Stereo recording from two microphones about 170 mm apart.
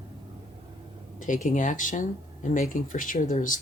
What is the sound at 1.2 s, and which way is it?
Speech, 50° left (ahead or behind).